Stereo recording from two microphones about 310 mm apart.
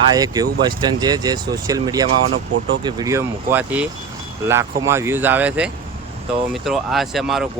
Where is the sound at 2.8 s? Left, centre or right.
Centre.